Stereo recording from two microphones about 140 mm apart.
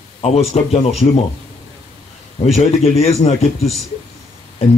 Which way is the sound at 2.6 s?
50° left (ahead or behind).